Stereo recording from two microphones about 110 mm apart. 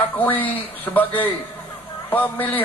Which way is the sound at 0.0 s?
15° left (ahead or behind).